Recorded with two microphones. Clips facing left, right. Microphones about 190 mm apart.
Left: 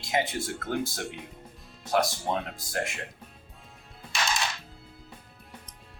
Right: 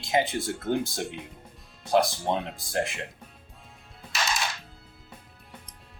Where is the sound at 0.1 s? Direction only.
25° right (ahead or behind).